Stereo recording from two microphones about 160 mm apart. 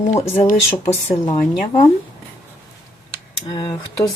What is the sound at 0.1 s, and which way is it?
Speech, 45° left (ahead or behind).